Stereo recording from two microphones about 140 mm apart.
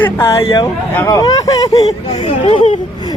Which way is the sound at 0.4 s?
30° left (ahead or behind).